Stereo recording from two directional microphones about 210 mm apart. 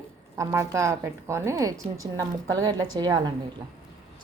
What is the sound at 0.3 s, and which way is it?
A woman's voice, 15° right (ahead or behind).